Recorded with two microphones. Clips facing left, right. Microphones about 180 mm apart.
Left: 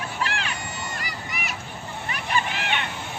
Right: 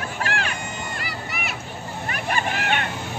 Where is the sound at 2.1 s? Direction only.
50° right (ahead or behind).